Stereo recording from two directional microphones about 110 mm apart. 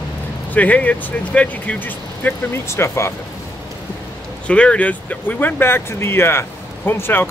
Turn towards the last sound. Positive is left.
turn(degrees=20)  # may be behind; listen again after turning